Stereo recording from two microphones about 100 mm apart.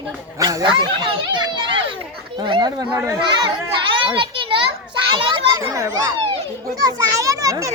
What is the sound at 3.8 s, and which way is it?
Children playing, 55° right (ahead or behind).